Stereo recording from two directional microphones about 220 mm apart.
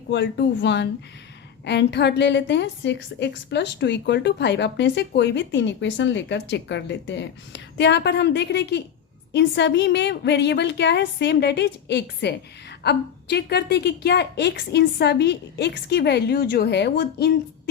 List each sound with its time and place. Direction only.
0.1 s a woman's voice: 55° left (ahead or behind)